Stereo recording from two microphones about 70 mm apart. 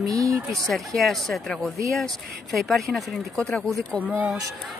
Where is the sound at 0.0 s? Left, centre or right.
Right.